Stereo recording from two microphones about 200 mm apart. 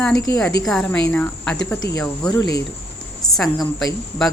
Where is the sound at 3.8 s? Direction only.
Centre (ahead or behind).